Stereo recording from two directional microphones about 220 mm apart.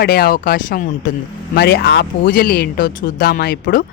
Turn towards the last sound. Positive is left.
turn(degrees=45)  # may be behind; listen again after turning